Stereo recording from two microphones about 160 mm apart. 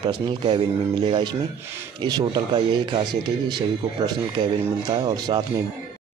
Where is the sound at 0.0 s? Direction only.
30° right (ahead or behind).